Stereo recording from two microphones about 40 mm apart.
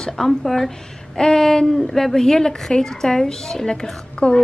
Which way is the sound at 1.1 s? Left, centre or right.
Centre.